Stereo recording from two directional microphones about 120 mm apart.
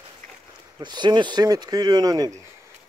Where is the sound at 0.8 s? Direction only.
40° right (ahead or behind).